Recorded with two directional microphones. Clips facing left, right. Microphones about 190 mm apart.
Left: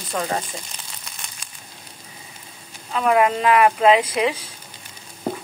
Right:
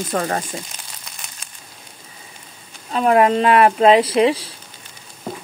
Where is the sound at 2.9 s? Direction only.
35° right (ahead or behind).